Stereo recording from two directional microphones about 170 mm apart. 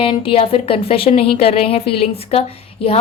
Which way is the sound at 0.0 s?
30° left (ahead or behind).